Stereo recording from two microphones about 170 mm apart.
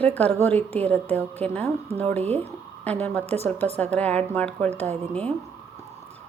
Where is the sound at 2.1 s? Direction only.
40° right (ahead or behind).